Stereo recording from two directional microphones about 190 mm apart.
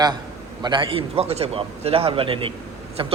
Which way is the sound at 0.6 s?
25° right (ahead or behind).